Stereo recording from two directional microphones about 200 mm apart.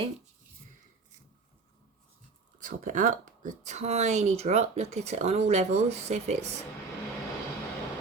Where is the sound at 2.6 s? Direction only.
40° right (ahead or behind).